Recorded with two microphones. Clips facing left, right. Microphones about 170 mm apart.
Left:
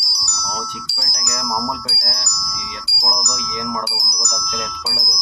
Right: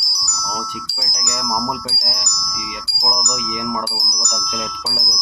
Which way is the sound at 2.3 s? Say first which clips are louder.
Right 1 dB; centre (ahead or behind).